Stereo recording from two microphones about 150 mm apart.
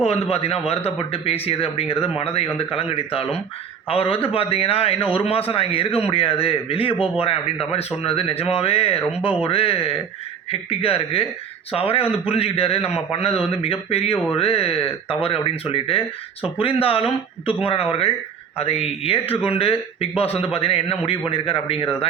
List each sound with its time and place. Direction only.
0.0 s speech: 45° left (ahead or behind)